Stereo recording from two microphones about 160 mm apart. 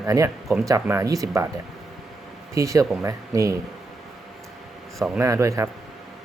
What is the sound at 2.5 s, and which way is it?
Speech, 20° right (ahead or behind).